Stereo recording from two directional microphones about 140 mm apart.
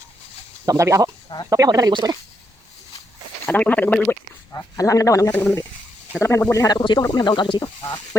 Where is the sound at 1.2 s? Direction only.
30° left (ahead or behind).